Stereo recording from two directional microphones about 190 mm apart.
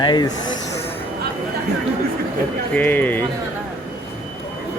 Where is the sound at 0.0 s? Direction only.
25° left (ahead or behind).